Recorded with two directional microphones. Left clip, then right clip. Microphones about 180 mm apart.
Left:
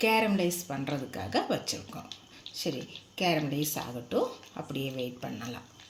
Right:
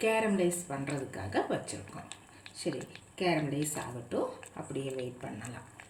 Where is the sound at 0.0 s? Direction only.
40° left (ahead or behind).